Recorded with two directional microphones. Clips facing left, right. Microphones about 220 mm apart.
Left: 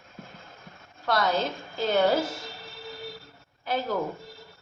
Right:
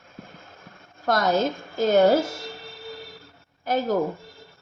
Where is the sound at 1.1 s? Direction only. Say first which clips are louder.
Right 4 dB; 45° right (ahead or behind).